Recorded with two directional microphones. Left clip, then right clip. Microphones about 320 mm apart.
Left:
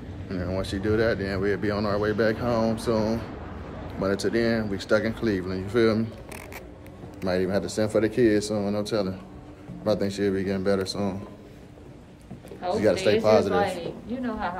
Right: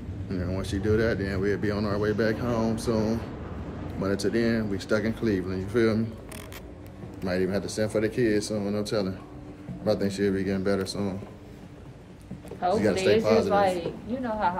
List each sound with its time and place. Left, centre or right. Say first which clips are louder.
0.3 s speech: left 3 dB; centre
7.2 s speech: left 2 dB; centre
12.7 s speech: left 2 dB; centre
13.7 s a woman's voice: right 1 dB; centre